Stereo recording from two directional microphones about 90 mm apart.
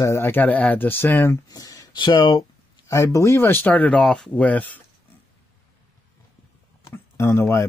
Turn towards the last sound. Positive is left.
turn(degrees=30)  # may be behind; listen again after turning